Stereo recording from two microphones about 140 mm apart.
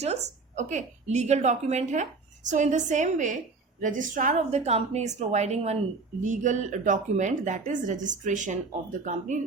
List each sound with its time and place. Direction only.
0.0 s a woman's voice: 55° right (ahead or behind)
6.2 s speech: 65° right (ahead or behind)